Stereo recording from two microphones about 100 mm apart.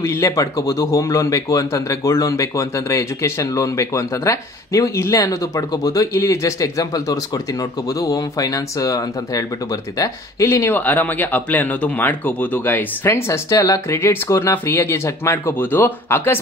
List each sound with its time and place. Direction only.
0.0 s speech: 30° left (ahead or behind)